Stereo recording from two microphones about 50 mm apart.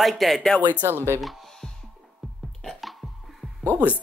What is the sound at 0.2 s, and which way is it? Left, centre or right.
Speech, centre.